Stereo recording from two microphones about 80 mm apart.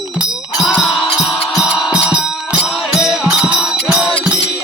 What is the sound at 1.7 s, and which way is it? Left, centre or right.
Music, centre.